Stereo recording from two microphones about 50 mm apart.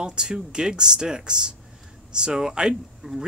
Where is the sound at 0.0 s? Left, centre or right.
Centre.